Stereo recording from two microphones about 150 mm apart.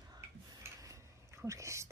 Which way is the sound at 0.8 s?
20° right (ahead or behind).